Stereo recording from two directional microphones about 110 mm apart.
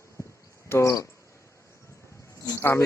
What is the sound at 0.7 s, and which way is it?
Speech, 25° left (ahead or behind).